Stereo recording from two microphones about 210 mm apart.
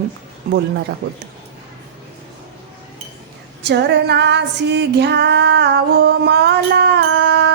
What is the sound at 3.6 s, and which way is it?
Female singing, 55° right (ahead or behind).